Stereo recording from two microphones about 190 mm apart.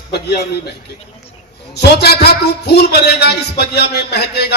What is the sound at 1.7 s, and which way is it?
Speech, 60° left (ahead or behind).